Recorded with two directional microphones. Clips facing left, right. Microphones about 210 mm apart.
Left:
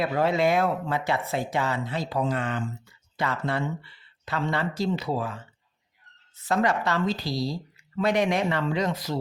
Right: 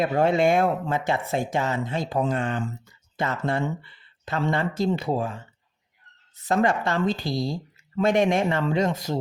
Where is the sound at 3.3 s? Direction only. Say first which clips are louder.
Right 4 dB; 45° right (ahead or behind).